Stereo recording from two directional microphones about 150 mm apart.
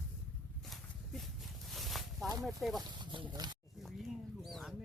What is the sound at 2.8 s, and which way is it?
Speech, 30° right (ahead or behind).